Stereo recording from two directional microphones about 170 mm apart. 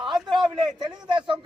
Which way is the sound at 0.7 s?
25° right (ahead or behind).